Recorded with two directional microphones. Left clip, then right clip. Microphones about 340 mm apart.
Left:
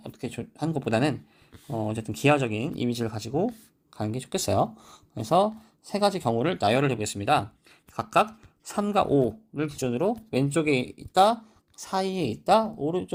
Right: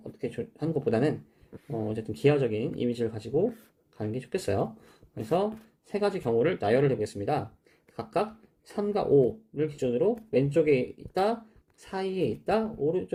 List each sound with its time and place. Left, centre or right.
0.2 s speech: left
7.1 s speech: left
8.7 s speech: left